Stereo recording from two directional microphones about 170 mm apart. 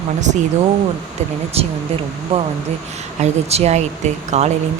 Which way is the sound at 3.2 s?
40° right (ahead or behind).